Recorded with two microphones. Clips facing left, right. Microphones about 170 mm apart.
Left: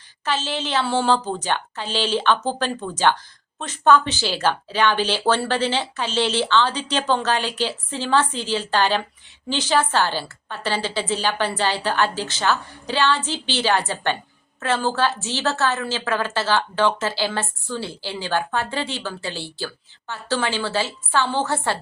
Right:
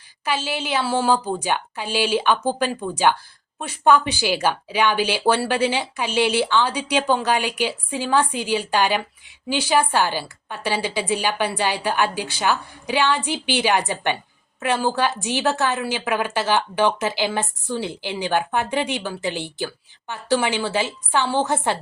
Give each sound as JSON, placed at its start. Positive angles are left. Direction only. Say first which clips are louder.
{"t": 0.3, "sound": "a woman's voice", "louder": "even", "side_deg": -10}